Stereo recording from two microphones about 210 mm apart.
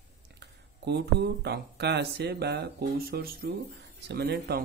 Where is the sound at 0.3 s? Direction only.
55° right (ahead or behind).